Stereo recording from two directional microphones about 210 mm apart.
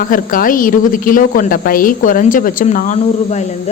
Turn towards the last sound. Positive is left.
turn(degrees=35)  # may be behind; listen again after turning